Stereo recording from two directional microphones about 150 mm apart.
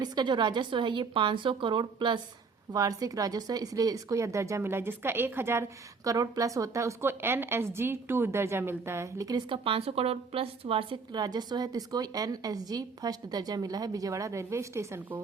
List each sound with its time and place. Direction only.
0.0 s a woman's voice: 30° right (ahead or behind)
9.6 s a woman's voice: 40° right (ahead or behind); by 15.2 s 15° right (ahead or behind)